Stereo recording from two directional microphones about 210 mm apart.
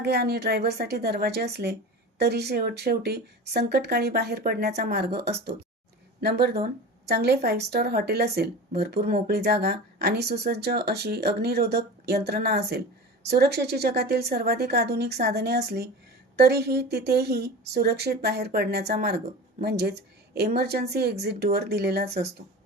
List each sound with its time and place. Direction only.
0.0 s speech: 50° right (ahead or behind)